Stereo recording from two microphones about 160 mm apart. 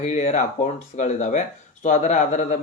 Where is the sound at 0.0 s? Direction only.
45° left (ahead or behind).